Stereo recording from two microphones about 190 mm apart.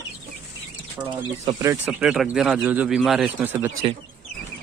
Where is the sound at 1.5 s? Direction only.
15° right (ahead or behind).